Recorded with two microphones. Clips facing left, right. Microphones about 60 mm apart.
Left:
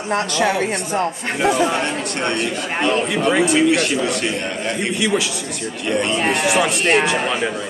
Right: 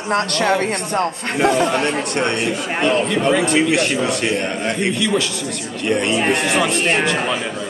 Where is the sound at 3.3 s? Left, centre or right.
Centre.